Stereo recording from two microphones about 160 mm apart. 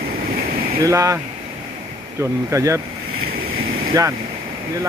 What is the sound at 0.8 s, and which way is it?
Speech, 20° right (ahead or behind).